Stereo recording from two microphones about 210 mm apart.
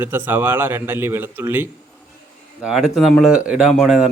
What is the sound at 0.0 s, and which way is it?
A man's voice, 10° right (ahead or behind).